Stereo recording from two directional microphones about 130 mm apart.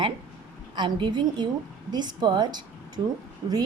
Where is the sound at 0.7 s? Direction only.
40° right (ahead or behind).